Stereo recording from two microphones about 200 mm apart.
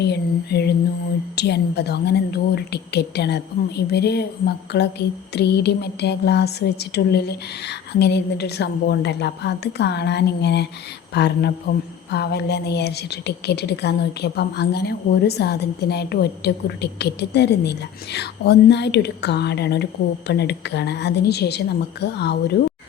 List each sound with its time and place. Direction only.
0.0 s a woman's voice: 55° left (ahead or behind)